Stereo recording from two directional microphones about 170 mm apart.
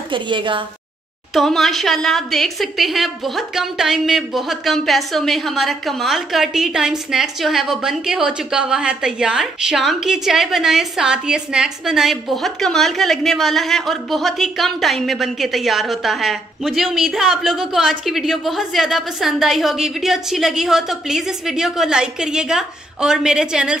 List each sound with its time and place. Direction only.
0.1 s a woman's voice: 30° right (ahead or behind)
1.3 s a woman's voice: centre (ahead or behind)